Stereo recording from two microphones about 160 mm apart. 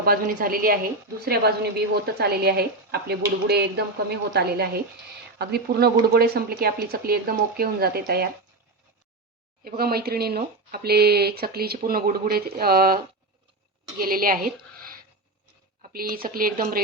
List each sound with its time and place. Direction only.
0.0 s speech: 65° right (ahead or behind)
1.2 s speech: 85° right
4.4 s speech: 75° right (ahead or behind)
9.6 s speech: 70° right (ahead or behind)
14.0 s a woman's voice: 65° right (ahead or behind)